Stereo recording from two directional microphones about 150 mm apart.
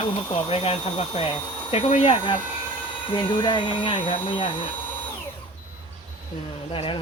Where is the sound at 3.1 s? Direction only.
35° left (ahead or behind).